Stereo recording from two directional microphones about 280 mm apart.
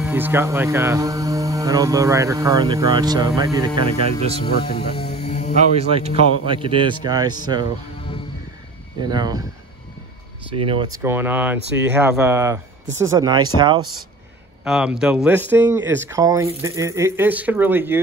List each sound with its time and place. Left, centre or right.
0.0 s speech: centre
4.7 s music: left
5.8 s a man's voice: right
9.0 s speech: centre
10.5 s speech: centre
14.6 s speech: centre